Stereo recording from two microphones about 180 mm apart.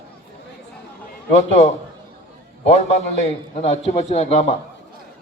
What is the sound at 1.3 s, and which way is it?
A man's voice, 35° left (ahead or behind).